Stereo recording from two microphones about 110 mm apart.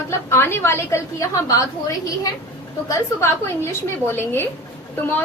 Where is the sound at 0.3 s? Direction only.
20° left (ahead or behind).